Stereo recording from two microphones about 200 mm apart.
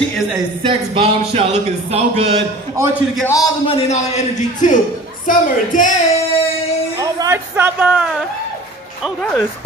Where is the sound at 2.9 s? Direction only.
10° left (ahead or behind); by 5.9 s 40° left (ahead or behind).